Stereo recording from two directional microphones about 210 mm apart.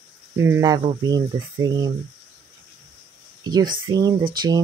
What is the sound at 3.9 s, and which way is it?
Speech, 20° right (ahead or behind).